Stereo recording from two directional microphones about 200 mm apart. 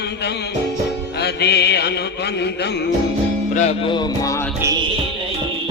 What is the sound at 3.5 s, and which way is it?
Music, 35° left (ahead or behind).